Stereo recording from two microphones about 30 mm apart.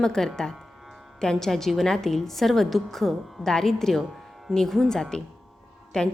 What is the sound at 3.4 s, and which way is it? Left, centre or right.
Speech, centre.